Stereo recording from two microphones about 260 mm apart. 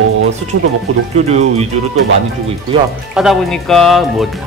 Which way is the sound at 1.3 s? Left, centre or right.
Right.